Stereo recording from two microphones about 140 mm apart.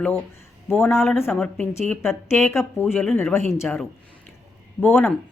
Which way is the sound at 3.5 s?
5° left (ahead or behind).